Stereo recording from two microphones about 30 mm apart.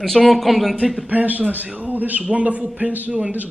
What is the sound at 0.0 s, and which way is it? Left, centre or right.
Speech, centre.